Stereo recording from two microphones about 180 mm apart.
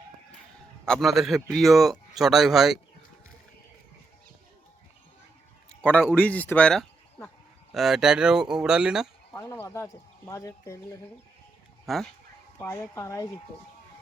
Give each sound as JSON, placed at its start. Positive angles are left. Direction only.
{"t": 0.9, "sound": "speech", "side_deg": 0}
{"t": 6.1, "sound": "speech", "side_deg": 10}
{"t": 9.3, "sound": "speech", "side_deg": 15}
{"t": 11.9, "sound": "speech", "side_deg": 0}
{"t": 12.5, "sound": "speech", "side_deg": 15}